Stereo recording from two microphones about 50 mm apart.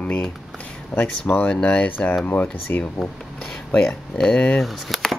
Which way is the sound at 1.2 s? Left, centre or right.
Left.